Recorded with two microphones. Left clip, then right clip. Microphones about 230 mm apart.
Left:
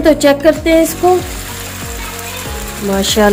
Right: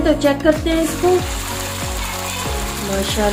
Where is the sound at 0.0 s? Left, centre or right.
Left.